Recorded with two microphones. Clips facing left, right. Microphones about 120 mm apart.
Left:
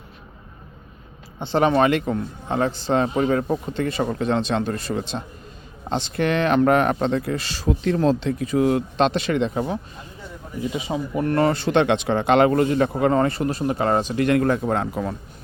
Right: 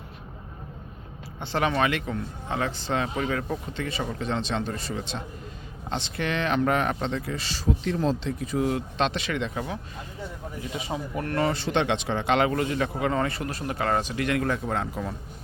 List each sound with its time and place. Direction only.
1.4 s a man's voice: 25° left (ahead or behind); by 5.0 s 55° left (ahead or behind)
5.9 s speech: 40° left (ahead or behind); by 8.8 s 70° left (ahead or behind)
9.0 s a man's voice: 40° left (ahead or behind)
10.8 s speech: 20° left (ahead or behind)
11.3 s a man's voice: 50° left (ahead or behind)